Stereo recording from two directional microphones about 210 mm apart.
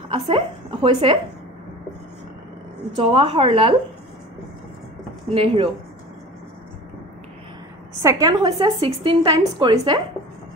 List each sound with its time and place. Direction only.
0.1 s a woman's voice: 25° right (ahead or behind)
3.0 s a woman's voice: 25° right (ahead or behind)
5.3 s a woman's voice: 25° right (ahead or behind)
8.0 s a woman's voice: 15° right (ahead or behind)